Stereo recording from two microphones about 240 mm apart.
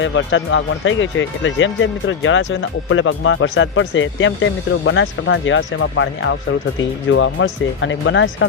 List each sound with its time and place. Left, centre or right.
0.0 s speech: left